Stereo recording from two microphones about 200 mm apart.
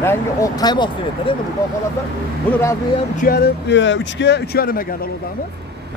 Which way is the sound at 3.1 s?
45° left (ahead or behind).